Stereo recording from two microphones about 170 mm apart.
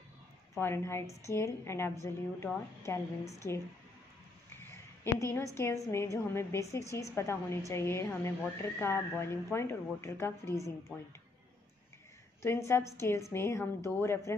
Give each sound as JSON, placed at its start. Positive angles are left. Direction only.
{"t": 0.6, "sound": "a woman's voice", "side_deg": 15}
{"t": 4.6, "sound": "a woman's voice", "side_deg": 15}
{"t": 12.4, "sound": "a woman's voice", "side_deg": 15}